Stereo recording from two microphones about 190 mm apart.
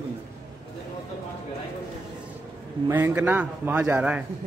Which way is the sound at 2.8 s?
10° right (ahead or behind).